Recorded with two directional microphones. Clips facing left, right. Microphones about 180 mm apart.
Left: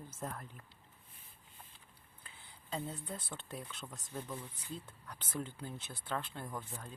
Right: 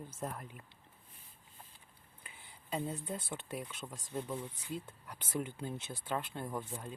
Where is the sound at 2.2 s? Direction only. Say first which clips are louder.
Right 2 dB; 15° right (ahead or behind).